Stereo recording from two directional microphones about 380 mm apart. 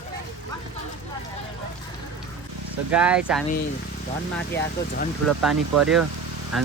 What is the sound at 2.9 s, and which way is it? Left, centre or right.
Speech, centre.